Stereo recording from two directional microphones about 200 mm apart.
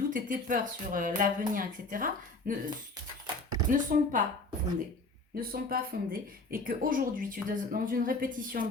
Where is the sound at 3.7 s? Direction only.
40° right (ahead or behind).